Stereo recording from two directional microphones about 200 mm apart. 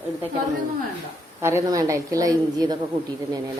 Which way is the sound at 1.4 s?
15° right (ahead or behind).